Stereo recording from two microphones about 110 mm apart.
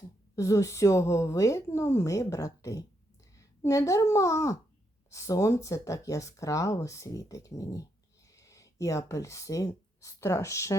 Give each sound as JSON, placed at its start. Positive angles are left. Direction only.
{"t": 0.3, "sound": "speech", "side_deg": 30}